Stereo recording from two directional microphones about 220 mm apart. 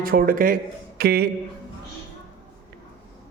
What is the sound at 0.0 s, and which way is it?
Speech, 40° right (ahead or behind).